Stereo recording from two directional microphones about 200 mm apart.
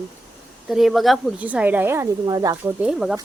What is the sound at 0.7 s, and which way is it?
Speech, centre (ahead or behind).